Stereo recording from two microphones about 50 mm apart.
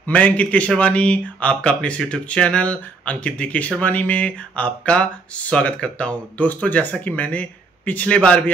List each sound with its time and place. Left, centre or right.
0.0 s speech: left